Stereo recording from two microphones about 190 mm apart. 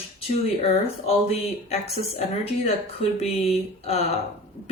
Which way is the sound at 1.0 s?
35° left (ahead or behind).